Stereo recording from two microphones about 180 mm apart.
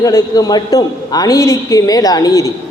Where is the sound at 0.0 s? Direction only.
15° left (ahead or behind).